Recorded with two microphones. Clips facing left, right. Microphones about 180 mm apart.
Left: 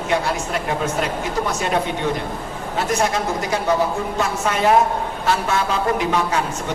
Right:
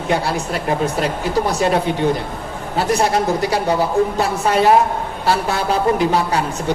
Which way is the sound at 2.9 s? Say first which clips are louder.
Right 5 dB; 35° right (ahead or behind).